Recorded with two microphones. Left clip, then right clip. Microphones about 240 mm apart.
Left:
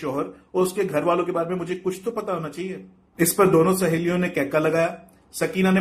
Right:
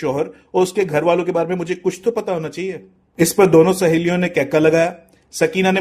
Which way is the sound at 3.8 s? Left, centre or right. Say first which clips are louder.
Right 6 dB; right.